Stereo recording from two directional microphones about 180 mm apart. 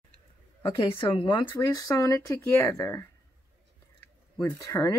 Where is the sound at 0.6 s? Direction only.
25° left (ahead or behind).